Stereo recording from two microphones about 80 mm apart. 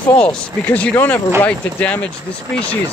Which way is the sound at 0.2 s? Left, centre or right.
Centre.